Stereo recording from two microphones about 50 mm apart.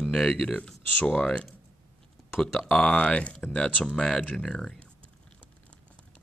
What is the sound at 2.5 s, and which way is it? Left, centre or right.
Speech, centre.